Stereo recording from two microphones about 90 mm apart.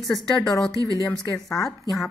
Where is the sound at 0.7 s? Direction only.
40° right (ahead or behind).